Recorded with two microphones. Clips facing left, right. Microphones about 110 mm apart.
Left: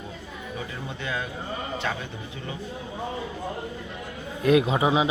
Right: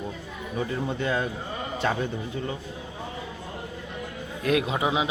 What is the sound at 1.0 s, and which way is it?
Speech, 40° right (ahead or behind).